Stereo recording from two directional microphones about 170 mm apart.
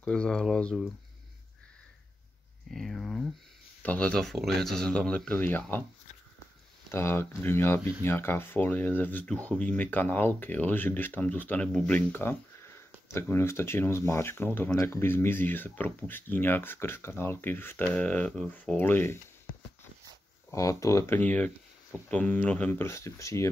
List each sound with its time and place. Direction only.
0.0 s speech: 5° left (ahead or behind)
2.7 s speech: centre (ahead or behind)
6.9 s speech: 15° left (ahead or behind)
20.5 s speech: 20° left (ahead or behind)